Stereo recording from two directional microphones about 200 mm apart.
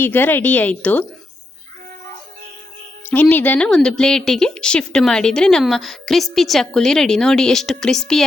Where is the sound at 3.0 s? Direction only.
10° left (ahead or behind).